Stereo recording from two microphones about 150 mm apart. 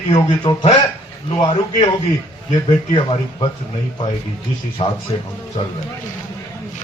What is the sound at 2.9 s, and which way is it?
Speech, 35° left (ahead or behind).